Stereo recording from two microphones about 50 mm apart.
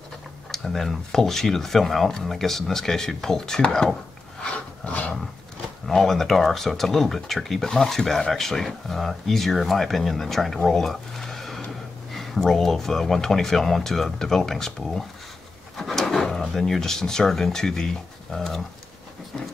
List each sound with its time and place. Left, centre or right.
0.5 s speech: centre
4.4 s a sound: left
5.9 s speech: centre